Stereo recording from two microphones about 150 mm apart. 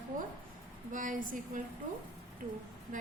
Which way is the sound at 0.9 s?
60° right (ahead or behind).